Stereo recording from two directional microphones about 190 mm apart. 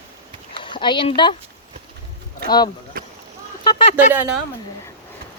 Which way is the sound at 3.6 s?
25° left (ahead or behind).